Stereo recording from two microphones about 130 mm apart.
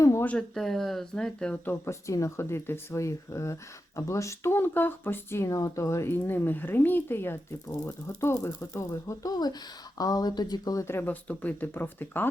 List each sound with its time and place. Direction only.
0.0 s a sound: 20° left (ahead or behind)
0.3 s speech: 5° left (ahead or behind)
1.7 s speech: 20° left (ahead or behind)